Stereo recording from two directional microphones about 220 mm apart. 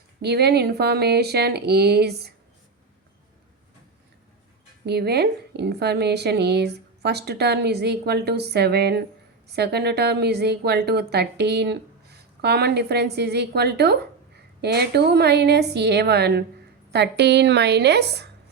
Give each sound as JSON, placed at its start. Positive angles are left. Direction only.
{"t": 0.2, "sound": "a woman's voice", "side_deg": -45}
{"t": 4.9, "sound": "a woman's voice", "side_deg": -45}